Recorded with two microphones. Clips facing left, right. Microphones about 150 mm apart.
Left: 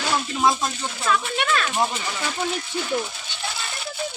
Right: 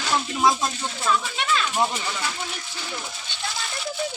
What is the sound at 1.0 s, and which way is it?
Speech, 60° left (ahead or behind).